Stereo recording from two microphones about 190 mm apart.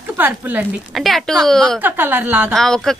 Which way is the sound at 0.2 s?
10° right (ahead or behind).